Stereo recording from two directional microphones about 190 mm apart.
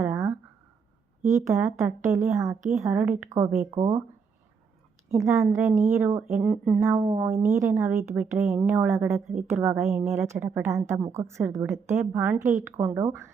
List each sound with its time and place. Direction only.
0.0 s a sound: 15° right (ahead or behind)
1.3 s a woman's voice: 15° right (ahead or behind)
5.2 s a woman's voice: 15° right (ahead or behind)
6.4 s speech: centre (ahead or behind)
6.8 s a woman's voice: 15° right (ahead or behind)